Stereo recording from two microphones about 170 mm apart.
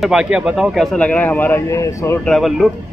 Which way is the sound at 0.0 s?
5° right (ahead or behind).